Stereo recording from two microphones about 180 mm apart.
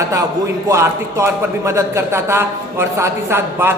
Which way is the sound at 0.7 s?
15° right (ahead or behind).